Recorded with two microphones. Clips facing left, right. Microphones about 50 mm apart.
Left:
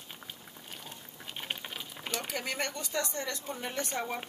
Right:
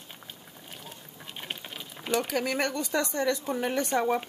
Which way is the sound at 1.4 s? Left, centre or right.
Centre.